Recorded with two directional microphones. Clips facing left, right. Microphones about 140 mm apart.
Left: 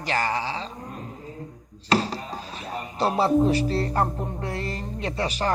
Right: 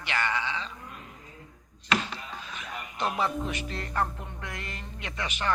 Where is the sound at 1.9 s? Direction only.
35° left (ahead or behind).